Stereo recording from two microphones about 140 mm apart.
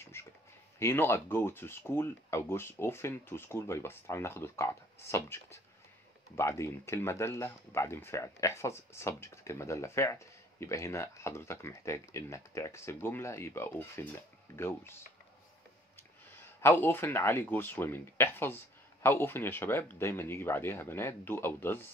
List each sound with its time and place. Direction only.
0.1 s a sound: 20° left (ahead or behind)
0.7 s speech: 15° left (ahead or behind)
16.6 s speech: 15° left (ahead or behind)